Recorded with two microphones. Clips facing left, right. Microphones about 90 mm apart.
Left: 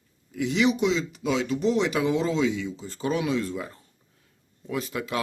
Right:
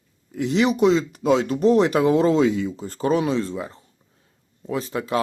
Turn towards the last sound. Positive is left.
turn(degrees=-30)  # may be behind; listen again after turning